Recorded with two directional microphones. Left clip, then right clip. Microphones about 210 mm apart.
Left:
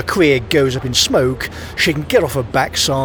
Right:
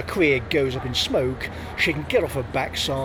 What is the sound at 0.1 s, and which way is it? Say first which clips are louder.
Speech: left 7 dB; 40° left (ahead or behind).